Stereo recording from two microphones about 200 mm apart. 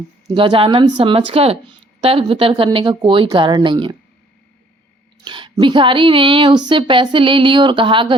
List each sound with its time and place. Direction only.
0.3 s speech: 25° right (ahead or behind)
5.2 s speech: 25° right (ahead or behind)